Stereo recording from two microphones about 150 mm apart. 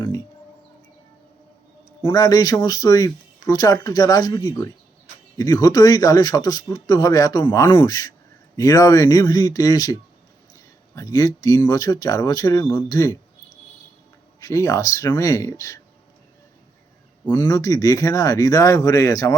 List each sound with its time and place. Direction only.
0.0 s a sound: 15° left (ahead or behind)
2.0 s speech: 20° left (ahead or behind)
14.4 s speech: 20° left (ahead or behind)
17.2 s speech: 15° left (ahead or behind)
17.5 s speech: 25° left (ahead or behind)